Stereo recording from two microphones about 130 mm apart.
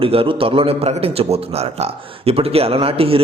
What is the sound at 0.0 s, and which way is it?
A man's voice, 45° right (ahead or behind).